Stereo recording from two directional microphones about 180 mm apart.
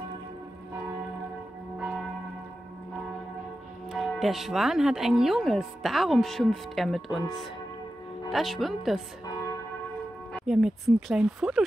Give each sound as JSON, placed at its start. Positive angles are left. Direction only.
{"t": 3.9, "sound": "speech", "side_deg": 0}
{"t": 8.3, "sound": "speech", "side_deg": 0}
{"t": 9.2, "sound": "church bell", "side_deg": 20}
{"t": 10.3, "sound": "speech", "side_deg": 0}